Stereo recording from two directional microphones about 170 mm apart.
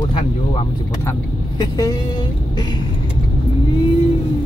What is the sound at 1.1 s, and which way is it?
Speech, 25° left (ahead or behind).